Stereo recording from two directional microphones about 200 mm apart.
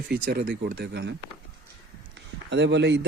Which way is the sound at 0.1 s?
50° right (ahead or behind).